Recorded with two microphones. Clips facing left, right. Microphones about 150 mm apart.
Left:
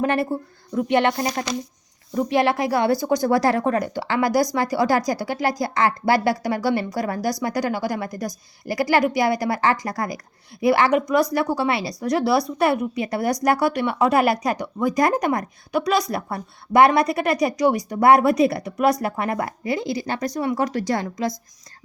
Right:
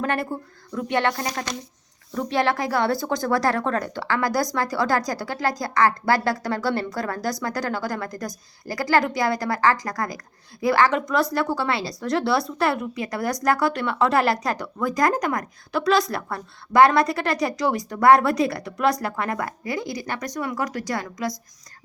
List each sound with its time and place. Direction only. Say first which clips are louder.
0.0 s a woman's voice: left 4 dB; 20° left (ahead or behind)